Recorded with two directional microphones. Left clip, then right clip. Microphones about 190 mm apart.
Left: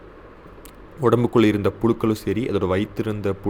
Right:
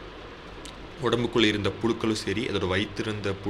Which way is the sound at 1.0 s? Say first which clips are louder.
Left 6 dB; 45° left (ahead or behind).